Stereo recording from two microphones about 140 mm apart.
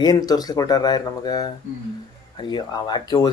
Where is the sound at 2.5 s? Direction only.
30° left (ahead or behind).